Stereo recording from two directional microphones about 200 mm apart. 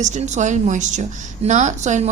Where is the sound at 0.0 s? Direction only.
35° right (ahead or behind).